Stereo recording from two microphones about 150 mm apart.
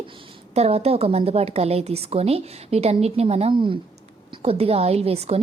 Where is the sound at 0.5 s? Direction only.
45° right (ahead or behind).